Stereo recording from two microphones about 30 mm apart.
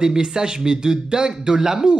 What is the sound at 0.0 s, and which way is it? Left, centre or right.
Speech, right.